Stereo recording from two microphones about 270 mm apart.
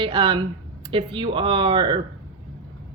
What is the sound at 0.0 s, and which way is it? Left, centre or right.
Speech, centre.